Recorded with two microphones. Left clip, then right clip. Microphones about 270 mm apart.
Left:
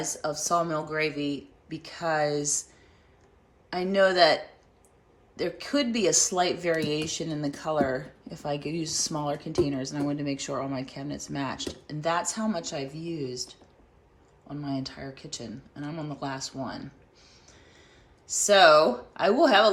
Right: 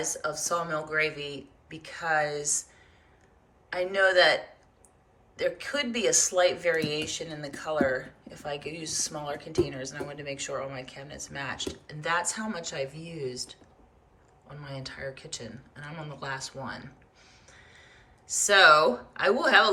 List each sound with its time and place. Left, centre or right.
0.0 s speech: centre
3.7 s speech: left
5.4 s speech: left